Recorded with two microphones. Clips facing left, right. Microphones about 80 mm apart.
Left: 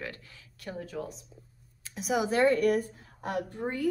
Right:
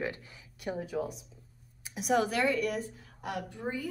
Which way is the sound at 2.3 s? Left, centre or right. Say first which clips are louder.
Left 6 dB; left.